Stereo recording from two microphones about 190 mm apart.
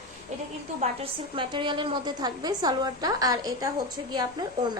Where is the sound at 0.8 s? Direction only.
30° right (ahead or behind).